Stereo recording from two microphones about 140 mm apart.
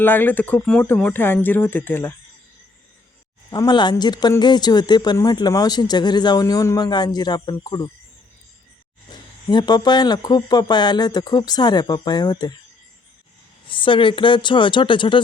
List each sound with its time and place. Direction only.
0.0 s speech: 15° left (ahead or behind)
3.5 s a man's voice: 30° left (ahead or behind)
9.0 s speech: 30° left (ahead or behind)
13.7 s speech: 35° left (ahead or behind)